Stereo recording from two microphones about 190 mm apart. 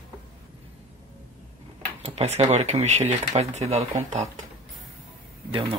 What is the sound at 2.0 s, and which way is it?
Speech, 35° right (ahead or behind).